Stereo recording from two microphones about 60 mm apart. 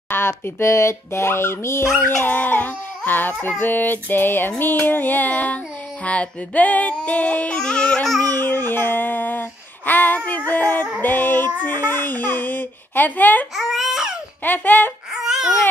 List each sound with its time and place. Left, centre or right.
0.1 s speech: left
3.1 s child singing: left
6.0 s female singing: left
7.0 s yodeling: left
8.4 s a sound: left
11.0 s child singing: left
13.6 s baby cry: centre
14.4 s child singing: left
15.1 s babbling: centre